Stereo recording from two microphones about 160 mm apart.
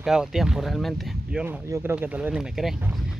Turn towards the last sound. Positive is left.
turn(degrees=-10)  # may be behind; listen again after turning